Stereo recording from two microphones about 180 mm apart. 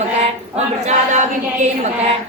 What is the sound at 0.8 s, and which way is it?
Speech, 40° right (ahead or behind).